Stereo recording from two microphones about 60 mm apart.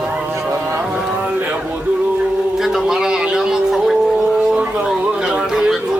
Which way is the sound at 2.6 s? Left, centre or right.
Centre.